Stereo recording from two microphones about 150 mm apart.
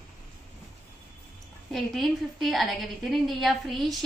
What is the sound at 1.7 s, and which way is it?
A woman's voice, centre (ahead or behind).